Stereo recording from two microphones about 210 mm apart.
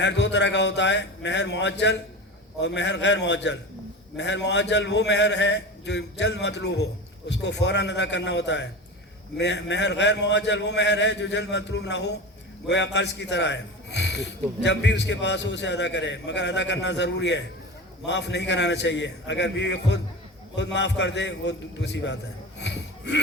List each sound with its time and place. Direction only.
0.0 s a man's voice: 55° left (ahead or behind)